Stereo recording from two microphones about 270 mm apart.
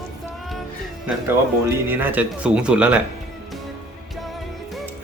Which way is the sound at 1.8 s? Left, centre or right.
Centre.